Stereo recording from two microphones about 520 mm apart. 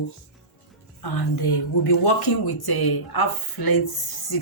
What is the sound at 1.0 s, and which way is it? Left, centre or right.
A woman's voice, left.